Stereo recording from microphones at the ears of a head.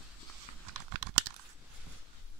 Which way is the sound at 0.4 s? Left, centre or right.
Right.